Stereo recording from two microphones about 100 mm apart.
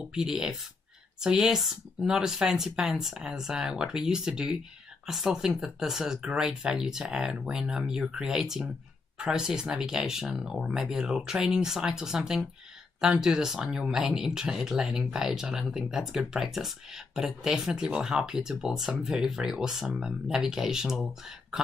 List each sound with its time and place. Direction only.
0.1 s speech: 5° right (ahead or behind)